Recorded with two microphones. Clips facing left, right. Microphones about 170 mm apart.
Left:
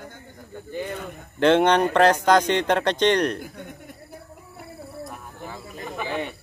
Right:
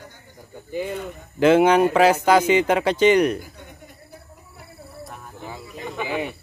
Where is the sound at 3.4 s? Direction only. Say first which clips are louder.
Left 5 dB; 55° left (ahead or behind).